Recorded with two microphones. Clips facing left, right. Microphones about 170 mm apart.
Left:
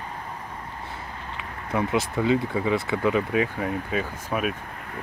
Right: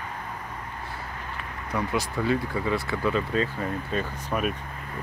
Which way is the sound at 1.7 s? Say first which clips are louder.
Left 3 dB; 20° left (ahead or behind).